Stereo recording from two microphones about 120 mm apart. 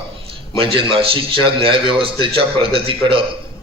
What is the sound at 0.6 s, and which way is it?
A man's voice, 50° right (ahead or behind).